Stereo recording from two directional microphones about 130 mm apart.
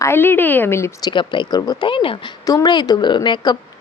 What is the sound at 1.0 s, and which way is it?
Speech, 35° left (ahead or behind).